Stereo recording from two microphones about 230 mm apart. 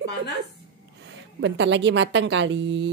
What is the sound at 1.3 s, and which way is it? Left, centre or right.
A woman's voice, right.